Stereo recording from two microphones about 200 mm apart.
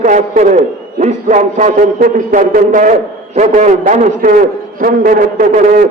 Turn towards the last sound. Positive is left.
turn(degrees=-40)  # may be behind; listen again after turning